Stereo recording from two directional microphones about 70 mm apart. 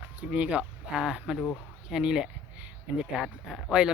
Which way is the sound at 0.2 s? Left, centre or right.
Centre.